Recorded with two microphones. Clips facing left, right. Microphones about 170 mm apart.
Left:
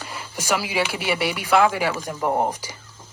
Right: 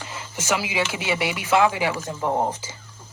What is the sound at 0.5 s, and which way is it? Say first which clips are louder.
Speech: left 1 dB; 20° right (ahead or behind).